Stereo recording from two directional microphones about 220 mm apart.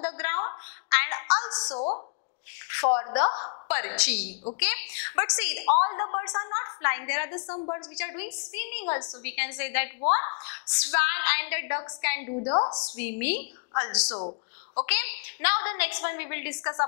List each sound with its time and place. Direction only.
0.0 s a sound: 10° left (ahead or behind); by 2.0 s 25° left (ahead or behind)
2.8 s a woman's voice: 20° left (ahead or behind)
3.6 s a woman's voice: 15° left (ahead or behind)
7.4 s a woman's voice: 25° left (ahead or behind)
7.9 s a woman's voice: 10° left (ahead or behind)
12.4 s a woman's voice: 25° left (ahead or behind)
12.8 s a woman's voice: 10° left (ahead or behind)
13.7 s a woman's voice: 25° left (ahead or behind)
14.9 s a woman's voice: 10° left (ahead or behind)